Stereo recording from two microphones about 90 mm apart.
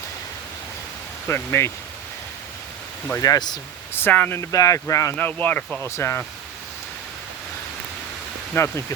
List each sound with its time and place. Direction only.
1.3 s speech: 30° left (ahead or behind)
3.2 s speech: 45° left (ahead or behind)
3.9 s speech: 20° left (ahead or behind)
4.4 s speech: 40° left (ahead or behind)
5.1 s speech: 20° left (ahead or behind)
8.5 s speech: 30° left (ahead or behind)